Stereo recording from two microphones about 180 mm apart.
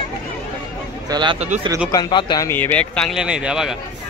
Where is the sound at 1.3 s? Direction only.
40° right (ahead or behind).